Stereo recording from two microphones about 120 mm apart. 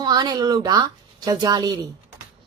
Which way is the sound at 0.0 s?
35° right (ahead or behind).